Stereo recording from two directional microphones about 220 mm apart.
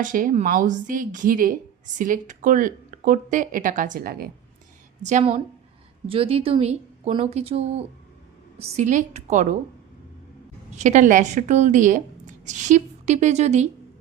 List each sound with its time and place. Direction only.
0.0 s speech: 35° right (ahead or behind)
5.0 s speech: 30° right (ahead or behind)
10.8 s speech: 35° right (ahead or behind)